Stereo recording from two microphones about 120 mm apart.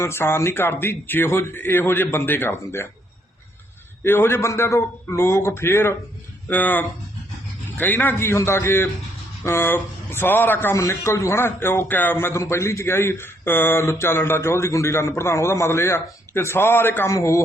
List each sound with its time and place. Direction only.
0.0 s speech: 20° left (ahead or behind)
4.0 s speech: 20° left (ahead or behind)